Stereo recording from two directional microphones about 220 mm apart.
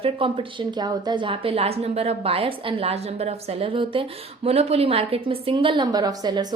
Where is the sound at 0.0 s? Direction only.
25° right (ahead or behind).